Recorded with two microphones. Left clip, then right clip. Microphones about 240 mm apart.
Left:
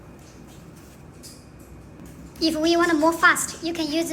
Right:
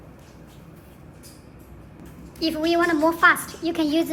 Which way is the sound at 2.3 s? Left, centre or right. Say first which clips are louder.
Left 1 dB; centre.